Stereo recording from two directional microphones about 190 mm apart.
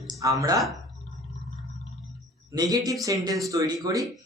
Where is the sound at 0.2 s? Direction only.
15° right (ahead or behind).